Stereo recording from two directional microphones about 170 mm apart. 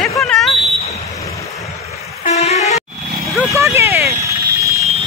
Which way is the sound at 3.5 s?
15° right (ahead or behind).